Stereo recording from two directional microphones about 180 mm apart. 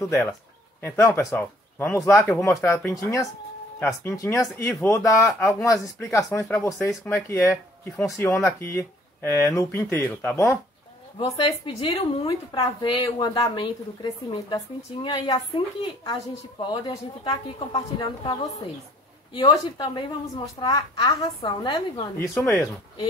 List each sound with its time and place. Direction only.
0.8 s speech: 15° left (ahead or behind)
11.1 s a woman's voice: 30° left (ahead or behind)
22.4 s speech: 15° left (ahead or behind)